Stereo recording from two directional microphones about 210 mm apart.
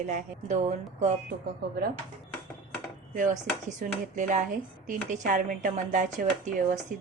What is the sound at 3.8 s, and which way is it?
Speech, 35° right (ahead or behind).